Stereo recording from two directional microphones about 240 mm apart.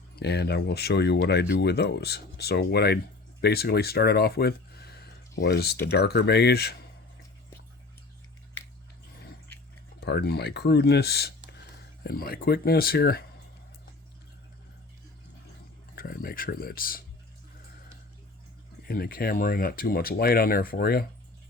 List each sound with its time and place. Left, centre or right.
0.2 s speech: left
10.0 s speech: left
16.0 s speech: left
18.9 s speech: left